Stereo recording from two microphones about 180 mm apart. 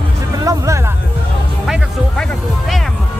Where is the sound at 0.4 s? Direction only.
20° right (ahead or behind).